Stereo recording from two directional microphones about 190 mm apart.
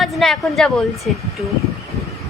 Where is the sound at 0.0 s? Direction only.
Centre (ahead or behind).